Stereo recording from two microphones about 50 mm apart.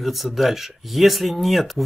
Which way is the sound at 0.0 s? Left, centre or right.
Centre.